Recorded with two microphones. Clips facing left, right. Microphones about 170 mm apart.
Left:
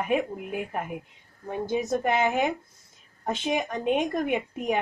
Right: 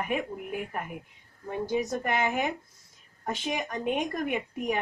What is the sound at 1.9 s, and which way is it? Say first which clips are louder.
A woman's voice: left 4 dB; 25° left (ahead or behind).